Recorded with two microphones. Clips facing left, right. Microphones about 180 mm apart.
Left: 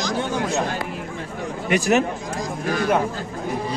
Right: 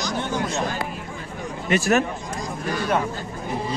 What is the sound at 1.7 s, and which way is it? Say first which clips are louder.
Speech: left 1 dB; 15° left (ahead or behind).